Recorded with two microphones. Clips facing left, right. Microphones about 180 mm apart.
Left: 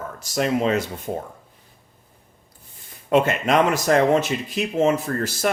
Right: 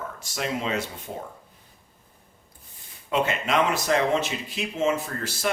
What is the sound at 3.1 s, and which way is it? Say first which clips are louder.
Speech: left 6 dB; 45° left (ahead or behind).